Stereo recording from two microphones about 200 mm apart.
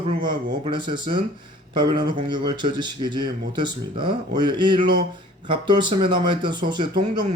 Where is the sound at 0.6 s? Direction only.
25° right (ahead or behind).